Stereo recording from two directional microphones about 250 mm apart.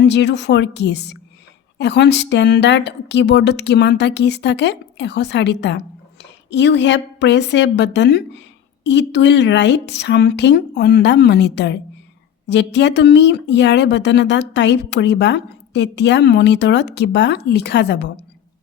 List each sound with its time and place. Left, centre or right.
0.0 s a woman's voice: left